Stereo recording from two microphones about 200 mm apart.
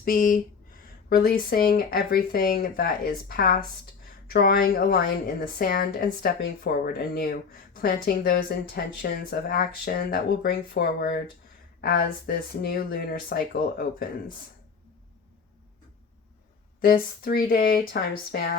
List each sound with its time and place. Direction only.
0.0 s speech: 45° left (ahead or behind)
16.8 s speech: 45° left (ahead or behind)